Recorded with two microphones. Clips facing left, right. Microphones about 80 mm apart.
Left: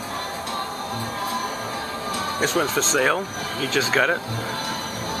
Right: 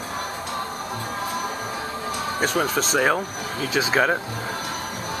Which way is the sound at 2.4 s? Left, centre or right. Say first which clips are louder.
Even; centre.